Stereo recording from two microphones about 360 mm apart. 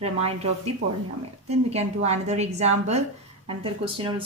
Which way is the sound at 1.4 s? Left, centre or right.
Centre.